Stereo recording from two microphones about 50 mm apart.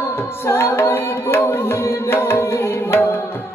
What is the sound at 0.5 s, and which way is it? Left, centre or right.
Music, left.